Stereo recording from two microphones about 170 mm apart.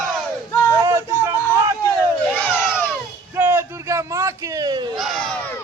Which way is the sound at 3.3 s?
15° right (ahead or behind).